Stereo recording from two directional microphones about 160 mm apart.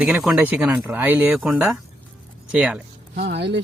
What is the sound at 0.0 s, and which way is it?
Speech, centre (ahead or behind).